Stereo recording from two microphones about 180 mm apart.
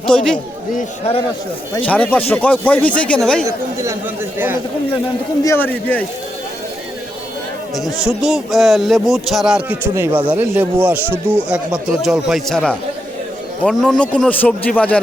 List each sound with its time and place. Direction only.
0.0 s speech: 5° left (ahead or behind)
0.8 s a man's voice: 35° left (ahead or behind)
1.9 s a man's voice: 10° left (ahead or behind)
3.4 s speech: 15° right (ahead or behind)
5.4 s a man's voice: 15° left (ahead or behind)
8.0 s a man's voice: centre (ahead or behind)